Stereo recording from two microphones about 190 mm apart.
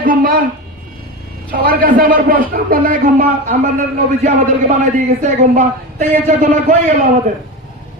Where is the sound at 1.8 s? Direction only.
50° right (ahead or behind).